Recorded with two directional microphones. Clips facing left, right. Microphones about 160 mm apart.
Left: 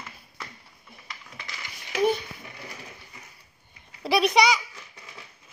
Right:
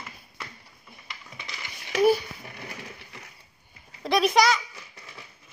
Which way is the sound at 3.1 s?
75° right (ahead or behind).